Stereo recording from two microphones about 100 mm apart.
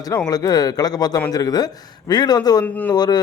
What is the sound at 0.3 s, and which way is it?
A man's voice, 40° left (ahead or behind).